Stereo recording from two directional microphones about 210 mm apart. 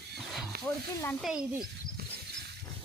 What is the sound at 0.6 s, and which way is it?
Speech, 5° left (ahead or behind).